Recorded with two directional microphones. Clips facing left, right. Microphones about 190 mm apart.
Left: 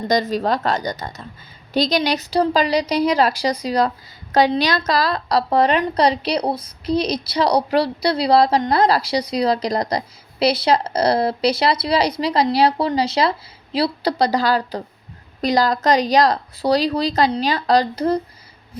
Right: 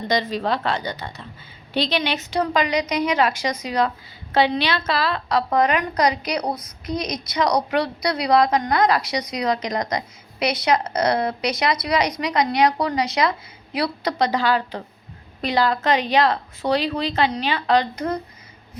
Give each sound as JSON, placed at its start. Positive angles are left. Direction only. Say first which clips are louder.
{"t": 0.1, "sound": "a woman's voice", "louder": "left 3 dB", "side_deg": 45}